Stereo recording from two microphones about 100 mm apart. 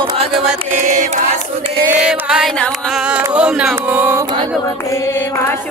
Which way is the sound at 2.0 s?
10° right (ahead or behind).